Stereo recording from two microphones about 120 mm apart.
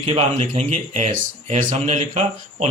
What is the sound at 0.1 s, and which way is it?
A man's voice, 60° right (ahead or behind).